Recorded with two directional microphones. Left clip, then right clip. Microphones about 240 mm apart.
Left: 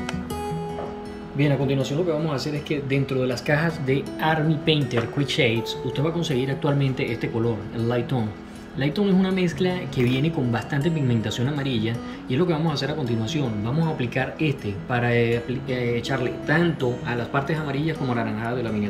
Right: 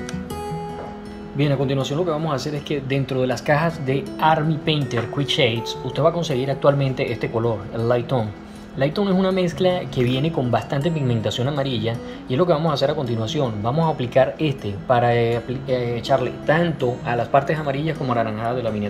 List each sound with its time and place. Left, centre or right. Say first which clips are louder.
1.4 s speech: right 2 dB; centre